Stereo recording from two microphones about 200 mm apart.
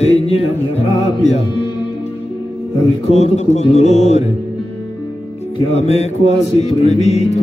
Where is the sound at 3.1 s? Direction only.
35° left (ahead or behind).